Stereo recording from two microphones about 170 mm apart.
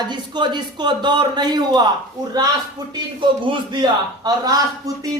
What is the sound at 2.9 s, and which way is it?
Speech, 30° right (ahead or behind).